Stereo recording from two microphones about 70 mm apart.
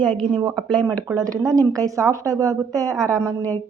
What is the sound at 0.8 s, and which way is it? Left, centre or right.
Speech, right.